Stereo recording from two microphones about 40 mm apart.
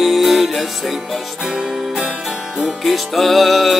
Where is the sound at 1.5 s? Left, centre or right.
Centre.